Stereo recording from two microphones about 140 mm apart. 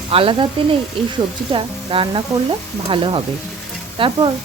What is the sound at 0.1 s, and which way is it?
Speech, 40° right (ahead or behind).